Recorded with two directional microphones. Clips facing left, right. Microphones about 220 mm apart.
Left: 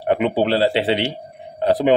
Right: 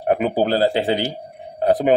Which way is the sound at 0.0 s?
90° left.